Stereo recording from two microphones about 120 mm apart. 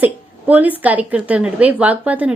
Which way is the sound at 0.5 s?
15° right (ahead or behind).